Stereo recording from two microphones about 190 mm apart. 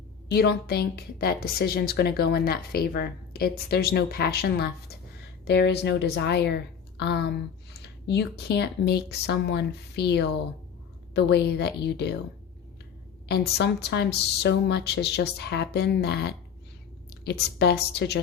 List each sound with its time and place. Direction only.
0.3 s speech: 55° left (ahead or behind)
13.2 s speech: 60° left (ahead or behind)